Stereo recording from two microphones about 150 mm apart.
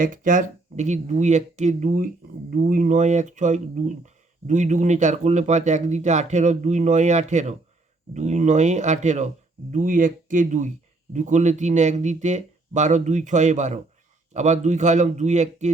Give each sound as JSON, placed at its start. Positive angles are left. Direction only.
{"t": 0.0, "sound": "speech", "side_deg": -60}
{"t": 9.7, "sound": "speech", "side_deg": -65}